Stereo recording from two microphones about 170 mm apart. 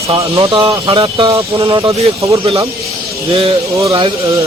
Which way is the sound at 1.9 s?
20° right (ahead or behind).